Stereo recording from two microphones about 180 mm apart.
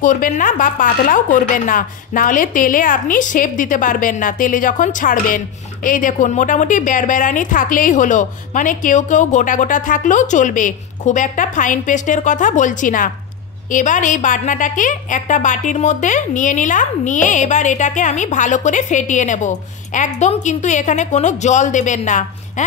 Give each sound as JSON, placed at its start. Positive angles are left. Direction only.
{"t": 0.0, "sound": "a woman's voice", "side_deg": 45}